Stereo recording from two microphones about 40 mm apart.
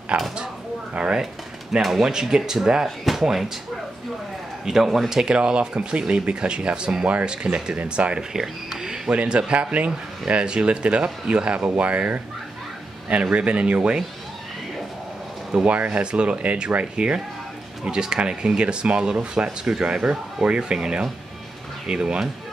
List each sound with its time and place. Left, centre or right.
0.1 s speech: right
1.8 s speech: centre
4.6 s speech: centre
5.1 s speech: centre
8.3 s speech: centre
9.1 s speech: right
13.1 s speech: right
15.6 s speech: right